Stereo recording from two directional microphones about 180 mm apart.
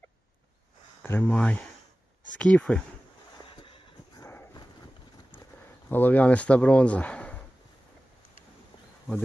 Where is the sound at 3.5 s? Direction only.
30° left (ahead or behind).